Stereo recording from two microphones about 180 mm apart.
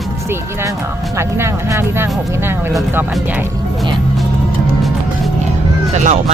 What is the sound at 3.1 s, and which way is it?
Speech, 5° right (ahead or behind).